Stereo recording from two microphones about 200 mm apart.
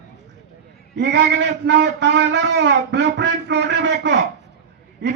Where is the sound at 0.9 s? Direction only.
60° right (ahead or behind).